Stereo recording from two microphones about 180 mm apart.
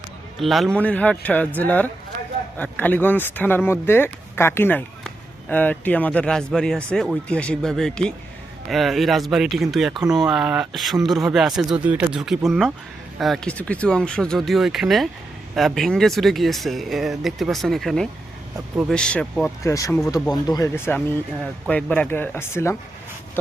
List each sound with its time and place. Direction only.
0.3 s speech: centre (ahead or behind)
19.6 s speech: 15° left (ahead or behind)